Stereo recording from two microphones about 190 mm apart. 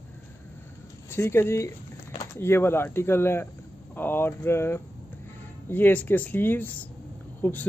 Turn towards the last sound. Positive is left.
turn(degrees=10)  # may be behind; listen again after turning